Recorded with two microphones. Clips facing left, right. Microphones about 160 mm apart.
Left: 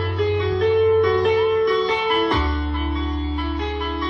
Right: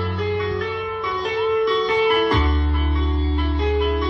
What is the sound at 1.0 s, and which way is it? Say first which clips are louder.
Music: left 9 dB; 70° left (ahead or behind).